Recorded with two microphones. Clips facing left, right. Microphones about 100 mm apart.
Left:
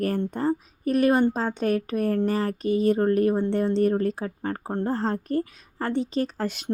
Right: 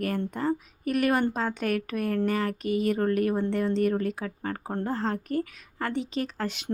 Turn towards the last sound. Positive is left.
turn(degrees=40)  # may be behind; listen again after turning